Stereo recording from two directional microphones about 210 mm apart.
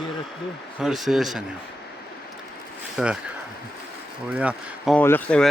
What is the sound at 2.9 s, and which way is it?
Speech, 5° right (ahead or behind).